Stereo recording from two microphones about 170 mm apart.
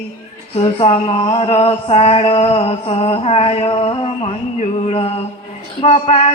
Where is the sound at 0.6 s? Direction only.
35° left (ahead or behind).